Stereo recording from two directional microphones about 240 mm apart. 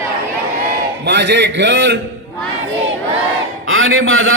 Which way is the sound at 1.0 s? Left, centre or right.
Right.